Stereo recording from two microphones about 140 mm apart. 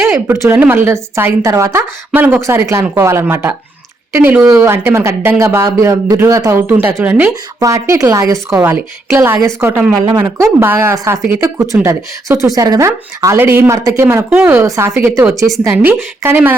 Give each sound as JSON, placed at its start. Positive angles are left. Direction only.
{"t": 0.0, "sound": "a woman's voice", "side_deg": -20}
{"t": 7.6, "sound": "a woman's voice", "side_deg": -20}